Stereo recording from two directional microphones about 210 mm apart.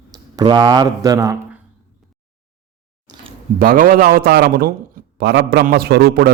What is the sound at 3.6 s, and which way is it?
A man's voice, 40° right (ahead or behind).